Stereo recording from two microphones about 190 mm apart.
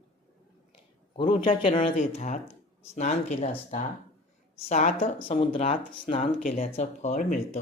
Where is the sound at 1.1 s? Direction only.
30° left (ahead or behind).